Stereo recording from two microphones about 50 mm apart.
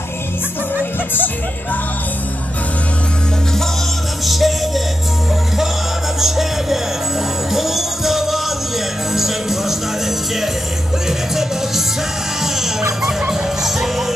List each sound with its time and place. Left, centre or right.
4.3 s music: centre
6.1 s music: centre
13.3 s music: centre